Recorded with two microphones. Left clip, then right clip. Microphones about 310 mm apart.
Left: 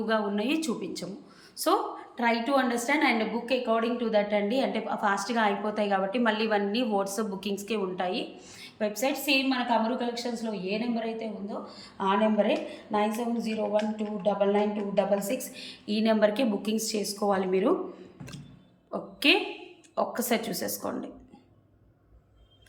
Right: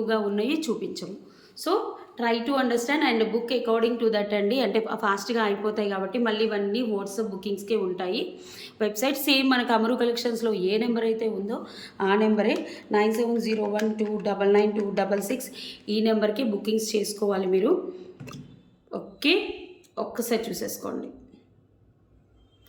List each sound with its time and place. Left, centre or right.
0.0 s a woman's voice: centre
13.1 s speech: left
14.3 s a woman's voice: centre
18.9 s a sound: centre
20.0 s a woman's voice: centre